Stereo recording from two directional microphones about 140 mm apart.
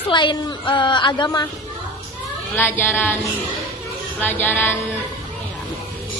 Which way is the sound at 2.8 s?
15° left (ahead or behind).